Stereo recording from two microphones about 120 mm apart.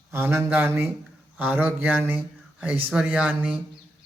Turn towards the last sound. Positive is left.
turn(degrees=-10)  # may be behind; listen again after turning